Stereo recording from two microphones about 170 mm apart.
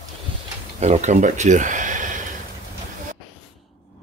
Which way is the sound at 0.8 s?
40° right (ahead or behind).